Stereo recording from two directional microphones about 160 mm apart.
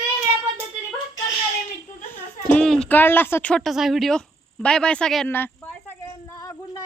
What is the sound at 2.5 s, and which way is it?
Speech, 5° left (ahead or behind).